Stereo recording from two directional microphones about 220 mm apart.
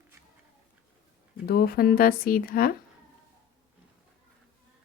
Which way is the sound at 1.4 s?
45° left (ahead or behind).